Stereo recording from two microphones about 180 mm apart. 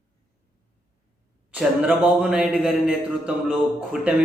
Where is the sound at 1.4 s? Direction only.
5° right (ahead or behind).